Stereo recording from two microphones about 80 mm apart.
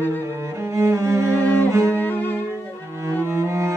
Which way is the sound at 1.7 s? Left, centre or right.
Right.